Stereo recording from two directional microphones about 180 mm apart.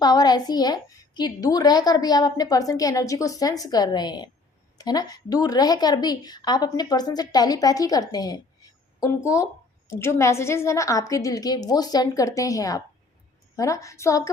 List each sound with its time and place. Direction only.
0.0 s a woman's voice: 20° left (ahead or behind)